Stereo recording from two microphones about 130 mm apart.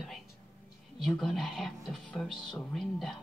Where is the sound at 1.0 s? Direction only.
Centre (ahead or behind).